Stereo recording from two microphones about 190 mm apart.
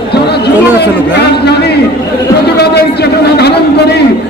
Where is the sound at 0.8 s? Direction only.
60° left (ahead or behind).